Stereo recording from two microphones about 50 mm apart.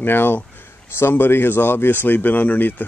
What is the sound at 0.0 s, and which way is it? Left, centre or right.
Speech, left.